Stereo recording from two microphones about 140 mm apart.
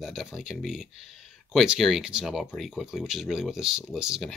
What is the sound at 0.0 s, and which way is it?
Speech, 5° right (ahead or behind).